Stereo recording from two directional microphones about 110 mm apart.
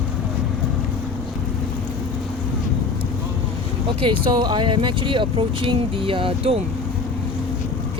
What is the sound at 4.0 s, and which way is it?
Speech, 45° right (ahead or behind).